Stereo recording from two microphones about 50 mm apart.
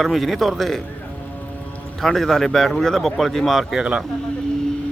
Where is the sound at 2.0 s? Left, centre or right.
Centre.